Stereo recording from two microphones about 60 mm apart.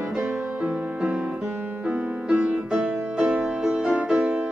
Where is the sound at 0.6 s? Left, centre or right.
Centre.